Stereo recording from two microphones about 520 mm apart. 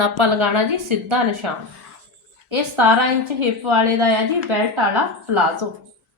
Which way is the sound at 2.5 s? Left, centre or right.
Right.